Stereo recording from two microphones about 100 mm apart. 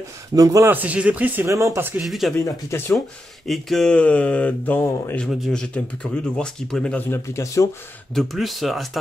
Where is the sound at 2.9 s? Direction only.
Centre (ahead or behind).